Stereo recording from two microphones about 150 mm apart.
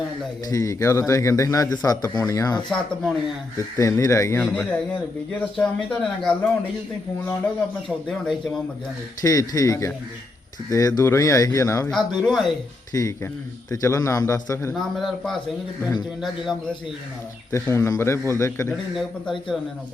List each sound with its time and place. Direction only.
0.5 s a man's voice: 20° left (ahead or behind)
2.6 s speech: 5° left (ahead or behind)
3.8 s a man's voice: 20° left (ahead or behind)
5.5 s speech: 5° left (ahead or behind)
7.9 s speech: centre (ahead or behind)
9.2 s a man's voice: 25° left (ahead or behind)
11.9 s speech: centre (ahead or behind)
12.9 s a man's voice: 20° left (ahead or behind)
14.7 s speech: centre (ahead or behind)
17.5 s a man's voice: 20° left (ahead or behind)
18.9 s speech: centre (ahead or behind)